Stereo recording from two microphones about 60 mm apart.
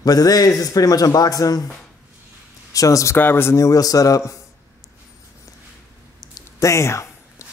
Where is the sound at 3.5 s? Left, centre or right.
Left.